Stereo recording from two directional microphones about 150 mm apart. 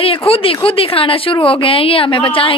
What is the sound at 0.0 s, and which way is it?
A woman's voice, 40° left (ahead or behind).